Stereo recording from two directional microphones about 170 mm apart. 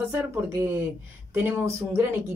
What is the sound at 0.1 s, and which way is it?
Speech, 15° right (ahead or behind).